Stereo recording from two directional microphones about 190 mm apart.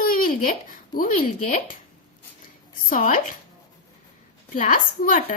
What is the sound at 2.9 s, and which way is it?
Speech, 45° left (ahead or behind).